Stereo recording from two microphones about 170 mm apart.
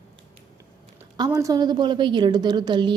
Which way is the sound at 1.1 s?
20° right (ahead or behind).